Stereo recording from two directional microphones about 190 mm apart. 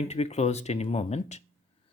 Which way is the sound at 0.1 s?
35° left (ahead or behind).